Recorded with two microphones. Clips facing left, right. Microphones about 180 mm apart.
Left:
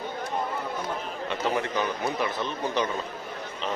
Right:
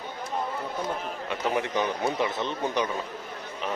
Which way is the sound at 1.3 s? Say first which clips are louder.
Even; 15° right (ahead or behind).